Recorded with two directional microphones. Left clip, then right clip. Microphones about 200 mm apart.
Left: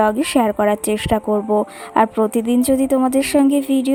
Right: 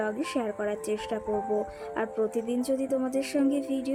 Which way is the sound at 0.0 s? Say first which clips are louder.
Left 14 dB; 45° left (ahead or behind).